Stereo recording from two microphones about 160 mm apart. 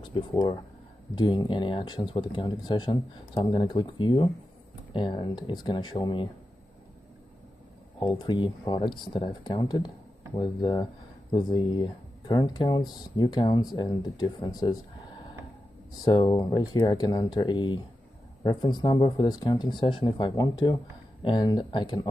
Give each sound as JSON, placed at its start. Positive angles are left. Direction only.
{"t": 0.3, "sound": "speech", "side_deg": 25}
{"t": 8.2, "sound": "speech", "side_deg": 30}
{"t": 16.0, "sound": "speech", "side_deg": 25}